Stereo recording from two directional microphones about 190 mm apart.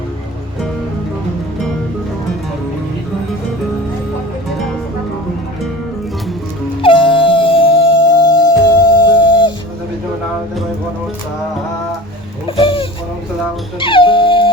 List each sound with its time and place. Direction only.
6.8 s music: 25° left (ahead or behind)
12.5 s a sound: 30° left (ahead or behind)
13.7 s music: 25° left (ahead or behind)